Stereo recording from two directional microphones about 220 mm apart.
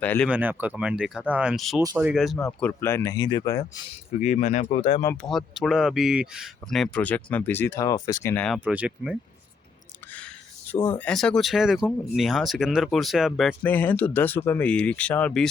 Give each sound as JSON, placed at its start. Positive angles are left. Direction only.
{"t": 0.0, "sound": "speech", "side_deg": 5}
{"t": 0.3, "sound": "speech", "side_deg": -5}
{"t": 1.8, "sound": "speech", "side_deg": -10}
{"t": 4.2, "sound": "speech", "side_deg": 35}
{"t": 5.2, "sound": "speech", "side_deg": 0}
{"t": 10.7, "sound": "speech", "side_deg": 10}